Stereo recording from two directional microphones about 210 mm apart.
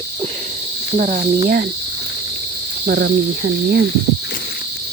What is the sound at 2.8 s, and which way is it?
Speech, 50° right (ahead or behind).